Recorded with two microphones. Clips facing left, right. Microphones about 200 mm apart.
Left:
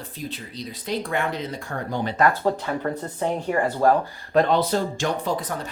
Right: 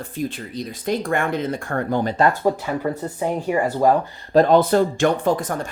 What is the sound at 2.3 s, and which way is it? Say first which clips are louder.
Speech: right 3 dB; 15° right (ahead or behind).